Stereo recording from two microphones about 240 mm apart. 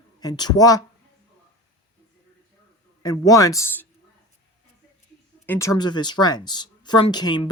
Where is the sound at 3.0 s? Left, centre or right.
Centre.